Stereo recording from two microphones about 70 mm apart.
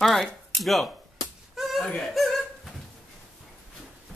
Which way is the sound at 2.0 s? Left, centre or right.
Centre.